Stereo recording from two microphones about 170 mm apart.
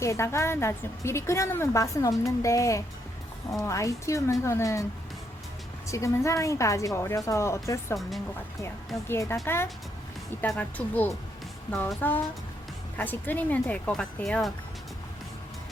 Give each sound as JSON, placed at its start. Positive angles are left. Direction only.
{"t": 0.0, "sound": "a woman's voice", "side_deg": 15}
{"t": 5.9, "sound": "a woman's voice", "side_deg": 15}
{"t": 9.0, "sound": "a woman's voice", "side_deg": 15}
{"t": 10.5, "sound": "a woman's voice", "side_deg": 10}